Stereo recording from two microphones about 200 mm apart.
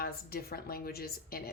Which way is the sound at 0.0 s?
50° left (ahead or behind).